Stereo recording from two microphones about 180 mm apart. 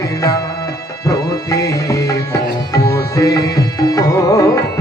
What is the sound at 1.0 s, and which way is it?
Music, 20° left (ahead or behind).